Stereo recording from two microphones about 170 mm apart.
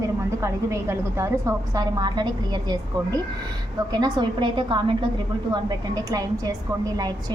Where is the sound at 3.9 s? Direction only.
25° right (ahead or behind).